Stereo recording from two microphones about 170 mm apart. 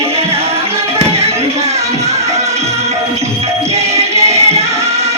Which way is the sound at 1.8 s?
20° right (ahead or behind).